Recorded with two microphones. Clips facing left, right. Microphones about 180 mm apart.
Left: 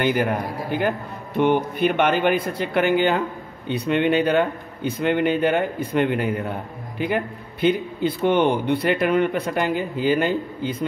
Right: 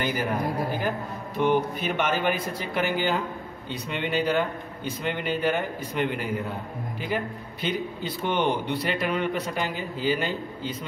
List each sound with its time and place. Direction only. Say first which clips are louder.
0.0 s a man's voice: left 7 dB; 60° left (ahead or behind)
1.3 s a man's voice: left 4 dB; 60° left (ahead or behind)